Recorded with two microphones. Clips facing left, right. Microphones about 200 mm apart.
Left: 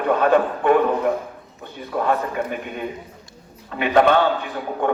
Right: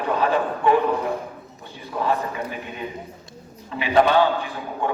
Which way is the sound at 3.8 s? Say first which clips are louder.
Left 1 dB; 55° left (ahead or behind).